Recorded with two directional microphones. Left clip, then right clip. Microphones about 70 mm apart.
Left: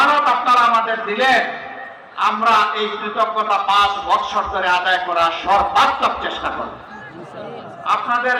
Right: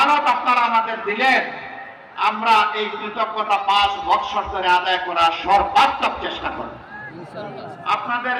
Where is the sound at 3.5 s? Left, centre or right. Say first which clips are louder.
Even; left.